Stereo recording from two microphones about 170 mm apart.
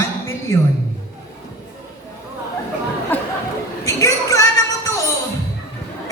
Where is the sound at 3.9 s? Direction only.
20° left (ahead or behind).